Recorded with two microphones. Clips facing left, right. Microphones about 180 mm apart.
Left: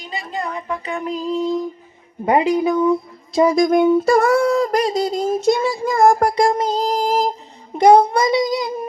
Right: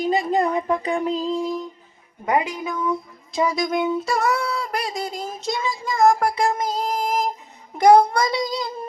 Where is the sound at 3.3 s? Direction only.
45° left (ahead or behind).